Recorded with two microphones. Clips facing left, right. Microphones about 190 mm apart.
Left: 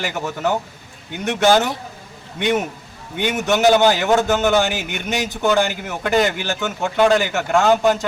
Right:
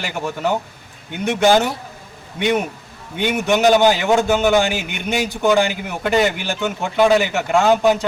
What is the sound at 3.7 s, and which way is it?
Speech, centre (ahead or behind).